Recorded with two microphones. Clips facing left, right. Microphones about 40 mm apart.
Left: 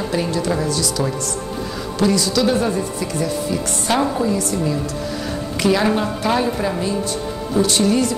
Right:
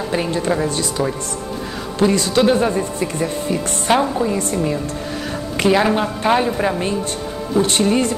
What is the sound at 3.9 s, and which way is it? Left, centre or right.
Speech, right.